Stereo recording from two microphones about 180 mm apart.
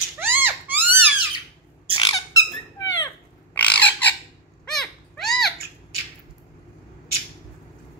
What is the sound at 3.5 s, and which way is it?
Crow, 10° left (ahead or behind).